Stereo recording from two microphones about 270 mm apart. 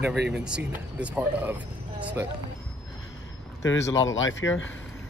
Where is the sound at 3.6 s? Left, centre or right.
Left.